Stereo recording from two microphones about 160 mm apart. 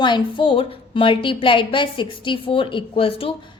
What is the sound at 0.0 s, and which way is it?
A woman's voice, 30° left (ahead or behind).